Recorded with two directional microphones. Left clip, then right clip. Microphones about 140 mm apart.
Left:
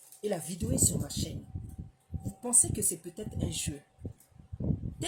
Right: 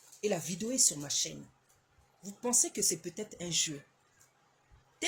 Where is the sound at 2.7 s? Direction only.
15° left (ahead or behind).